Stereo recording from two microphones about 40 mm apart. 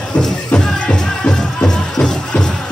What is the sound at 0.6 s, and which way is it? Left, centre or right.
Music, centre.